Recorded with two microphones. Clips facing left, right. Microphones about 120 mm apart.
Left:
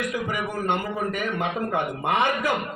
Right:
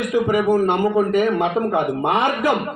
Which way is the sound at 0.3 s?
35° right (ahead or behind).